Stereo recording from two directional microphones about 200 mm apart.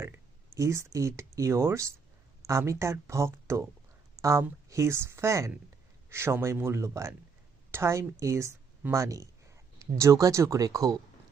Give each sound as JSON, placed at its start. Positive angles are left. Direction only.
{"t": 0.5, "sound": "speech", "side_deg": -15}